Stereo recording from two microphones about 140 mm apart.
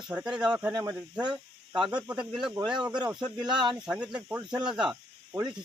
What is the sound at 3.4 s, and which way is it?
Speech, 35° right (ahead or behind).